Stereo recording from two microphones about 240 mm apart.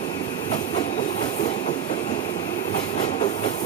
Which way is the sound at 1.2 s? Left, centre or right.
Left.